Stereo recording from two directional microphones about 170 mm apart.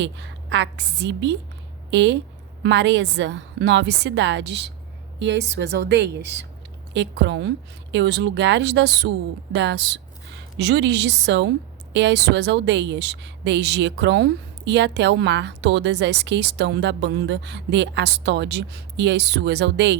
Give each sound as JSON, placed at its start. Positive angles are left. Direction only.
{"t": 0.0, "sound": "a woman's voice", "side_deg": -90}